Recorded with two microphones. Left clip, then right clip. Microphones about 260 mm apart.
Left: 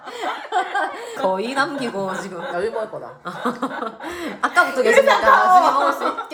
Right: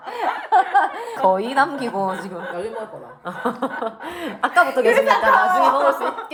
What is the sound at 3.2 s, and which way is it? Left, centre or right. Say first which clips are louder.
Speech: right 1 dB; centre.